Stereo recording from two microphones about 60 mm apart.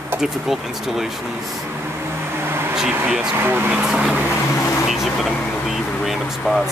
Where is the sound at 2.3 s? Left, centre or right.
Right.